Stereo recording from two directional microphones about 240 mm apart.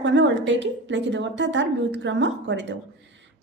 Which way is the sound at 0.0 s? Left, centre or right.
Right.